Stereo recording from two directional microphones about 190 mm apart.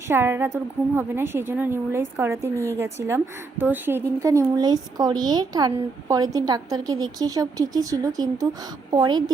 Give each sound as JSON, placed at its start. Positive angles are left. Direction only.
{"t": 0.1, "sound": "a woman's voice", "side_deg": -10}